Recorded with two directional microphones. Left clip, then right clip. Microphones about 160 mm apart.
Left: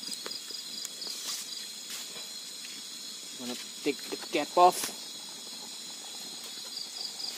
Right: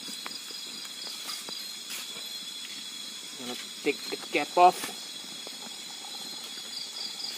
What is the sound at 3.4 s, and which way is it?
Speech, 80° left.